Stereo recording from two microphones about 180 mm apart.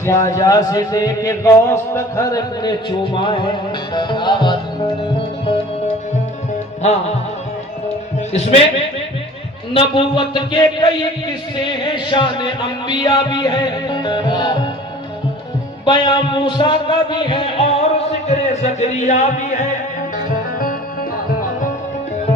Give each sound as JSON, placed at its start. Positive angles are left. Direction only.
{"t": 0.0, "sound": "a man's voice", "side_deg": 15}
{"t": 8.3, "sound": "a man's voice", "side_deg": 35}
{"t": 9.7, "sound": "a man's voice", "side_deg": 30}
{"t": 11.5, "sound": "music", "side_deg": 25}
{"t": 15.9, "sound": "a man's voice", "side_deg": 25}